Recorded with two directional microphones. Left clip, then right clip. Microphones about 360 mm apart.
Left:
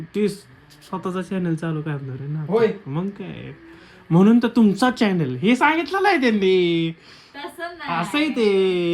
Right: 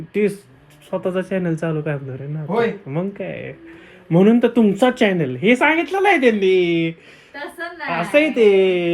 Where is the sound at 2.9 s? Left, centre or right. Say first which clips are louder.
Right 5 dB; centre.